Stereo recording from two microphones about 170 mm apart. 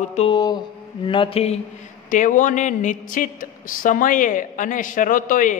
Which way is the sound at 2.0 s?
50° left (ahead or behind).